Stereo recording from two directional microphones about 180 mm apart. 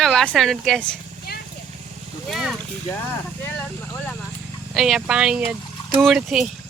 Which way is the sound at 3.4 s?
10° left (ahead or behind).